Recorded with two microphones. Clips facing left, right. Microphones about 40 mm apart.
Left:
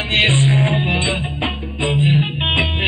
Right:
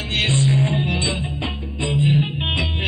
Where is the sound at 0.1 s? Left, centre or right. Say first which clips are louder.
Left 4 dB; left.